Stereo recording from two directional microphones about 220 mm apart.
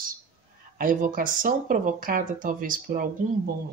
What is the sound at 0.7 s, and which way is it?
Speech, 40° right (ahead or behind).